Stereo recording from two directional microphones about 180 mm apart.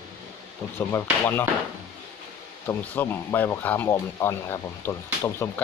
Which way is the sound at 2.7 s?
10° left (ahead or behind).